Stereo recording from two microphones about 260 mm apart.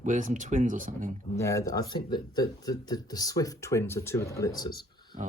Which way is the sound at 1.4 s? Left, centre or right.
Centre.